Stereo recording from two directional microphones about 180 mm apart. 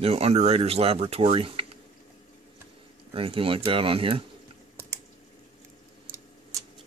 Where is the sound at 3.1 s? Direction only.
30° right (ahead or behind).